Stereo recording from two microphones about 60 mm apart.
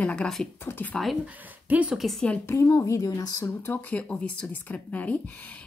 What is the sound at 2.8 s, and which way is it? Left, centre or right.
Speech, left.